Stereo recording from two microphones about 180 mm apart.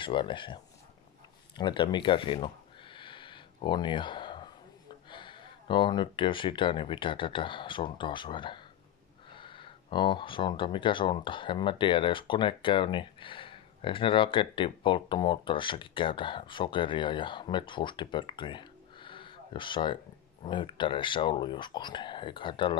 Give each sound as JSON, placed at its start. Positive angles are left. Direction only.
{"t": 0.0, "sound": "speech", "side_deg": 25}
{"t": 1.6, "sound": "a sound", "side_deg": 25}
{"t": 5.1, "sound": "speech", "side_deg": 25}